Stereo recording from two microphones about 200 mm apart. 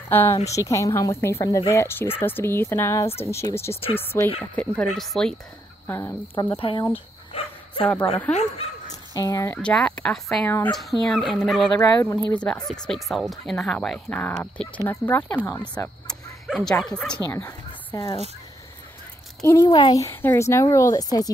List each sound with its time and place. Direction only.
0.1 s speech: 10° left (ahead or behind)
3.7 s speech: 30° left (ahead or behind)
4.6 s speech: 5° left (ahead or behind)
6.4 s speech: 20° left (ahead or behind)
7.3 s bow-wow: 30° left (ahead or behind)
8.3 s speech: 35° left (ahead or behind)
9.1 s speech: 15° left (ahead or behind)
9.6 s speech: 5° left (ahead or behind)
10.5 s speech: 15° left (ahead or behind)
10.8 s speech: centre (ahead or behind)
11.8 s speech: 15° left (ahead or behind)
12.3 s speech: 5° left (ahead or behind)
19.4 s speech: 20° left (ahead or behind)